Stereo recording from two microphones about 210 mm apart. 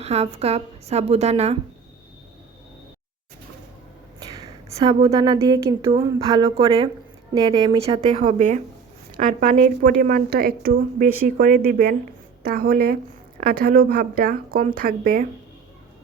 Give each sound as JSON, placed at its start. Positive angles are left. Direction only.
{"t": 0.0, "sound": "a woman's voice", "side_deg": -30}
{"t": 4.2, "sound": "a woman's voice", "side_deg": -20}